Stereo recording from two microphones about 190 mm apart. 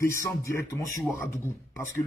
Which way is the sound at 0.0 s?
15° left (ahead or behind).